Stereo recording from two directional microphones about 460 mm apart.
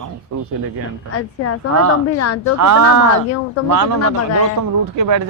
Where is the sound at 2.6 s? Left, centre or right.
Right.